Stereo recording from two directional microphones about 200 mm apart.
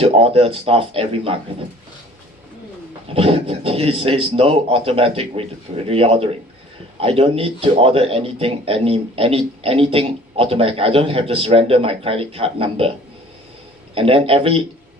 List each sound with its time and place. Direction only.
0.0 s speech: 30° right (ahead or behind)
3.1 s speech: 30° right (ahead or behind)
13.9 s speech: 30° right (ahead or behind)